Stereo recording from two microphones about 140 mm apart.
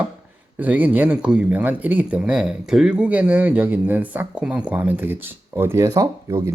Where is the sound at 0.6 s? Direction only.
10° right (ahead or behind).